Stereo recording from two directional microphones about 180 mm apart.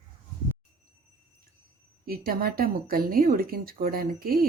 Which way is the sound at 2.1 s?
55° right (ahead or behind).